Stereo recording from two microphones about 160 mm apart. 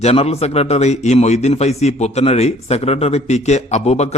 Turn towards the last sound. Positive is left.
turn(degrees=45)  # may be behind; listen again after turning